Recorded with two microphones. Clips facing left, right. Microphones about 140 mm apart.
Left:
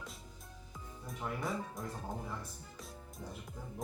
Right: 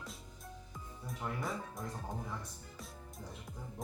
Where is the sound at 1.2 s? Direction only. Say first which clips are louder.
Left 2 dB; centre (ahead or behind).